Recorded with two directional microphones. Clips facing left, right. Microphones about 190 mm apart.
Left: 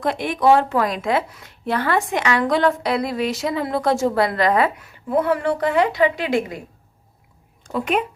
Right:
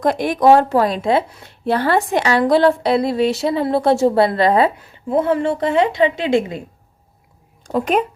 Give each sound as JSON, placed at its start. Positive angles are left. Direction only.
{"t": 0.0, "sound": "speech", "side_deg": -40}
{"t": 7.7, "sound": "speech", "side_deg": -40}